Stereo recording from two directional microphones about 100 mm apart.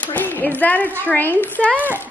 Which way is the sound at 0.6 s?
15° left (ahead or behind).